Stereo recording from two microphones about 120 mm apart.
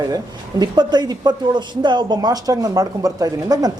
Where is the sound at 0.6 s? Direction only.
35° right (ahead or behind).